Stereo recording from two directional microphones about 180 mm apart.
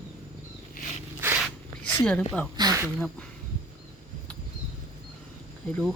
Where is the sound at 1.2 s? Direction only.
10° right (ahead or behind).